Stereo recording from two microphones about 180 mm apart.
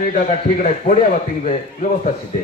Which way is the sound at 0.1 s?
45° left (ahead or behind).